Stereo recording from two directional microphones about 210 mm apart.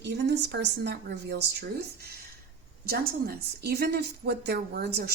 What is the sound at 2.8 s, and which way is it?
A woman's voice, 45° right (ahead or behind).